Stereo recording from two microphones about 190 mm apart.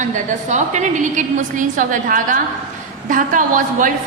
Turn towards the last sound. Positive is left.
turn(degrees=-45)  # may be behind; listen again after turning